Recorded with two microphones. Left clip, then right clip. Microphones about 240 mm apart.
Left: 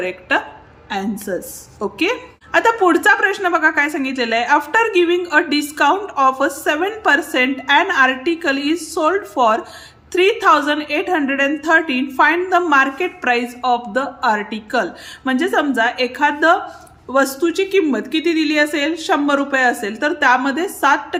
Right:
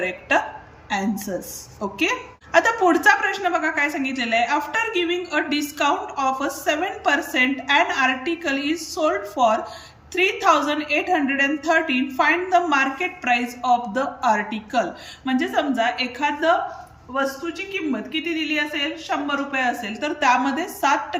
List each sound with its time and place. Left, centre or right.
0.0 s a woman's voice: centre